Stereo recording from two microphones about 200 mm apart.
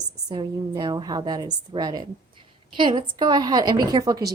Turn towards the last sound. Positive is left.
turn(degrees=-20)  # may be behind; listen again after turning